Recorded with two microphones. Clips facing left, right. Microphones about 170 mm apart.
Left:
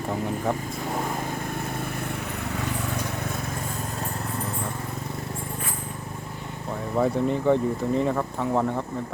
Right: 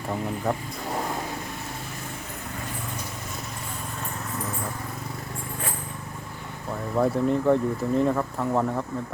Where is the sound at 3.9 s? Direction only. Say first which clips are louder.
Left 3 dB; 35° left (ahead or behind).